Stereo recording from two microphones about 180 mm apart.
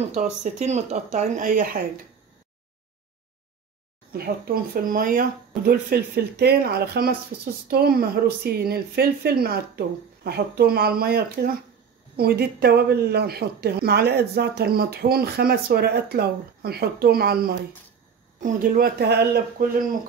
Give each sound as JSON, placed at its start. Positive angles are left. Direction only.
{"t": 0.0, "sound": "speech", "side_deg": -40}
{"t": 4.1, "sound": "a woman's voice", "side_deg": -55}